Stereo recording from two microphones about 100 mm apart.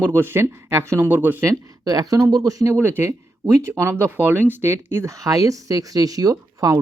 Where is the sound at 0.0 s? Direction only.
25° right (ahead or behind).